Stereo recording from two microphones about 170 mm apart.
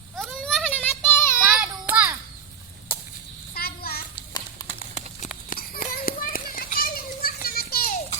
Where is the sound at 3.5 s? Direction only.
65° left (ahead or behind).